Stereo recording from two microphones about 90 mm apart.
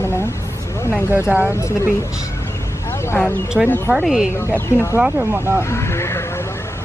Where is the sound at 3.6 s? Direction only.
15° right (ahead or behind).